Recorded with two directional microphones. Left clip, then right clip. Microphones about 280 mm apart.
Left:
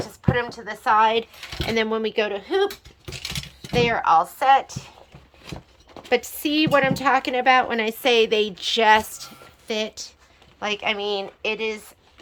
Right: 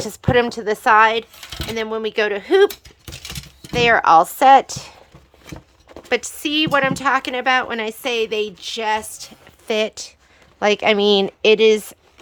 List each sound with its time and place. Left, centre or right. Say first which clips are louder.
0.0 s speech: right 7 dB; right
3.8 s speech: right 6 dB; centre
4.0 s speech: right 6 dB; right
6.1 s speech: right 1 dB; centre; by 11.9 s right